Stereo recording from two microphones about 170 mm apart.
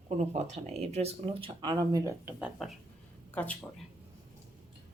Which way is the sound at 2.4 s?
Centre (ahead or behind).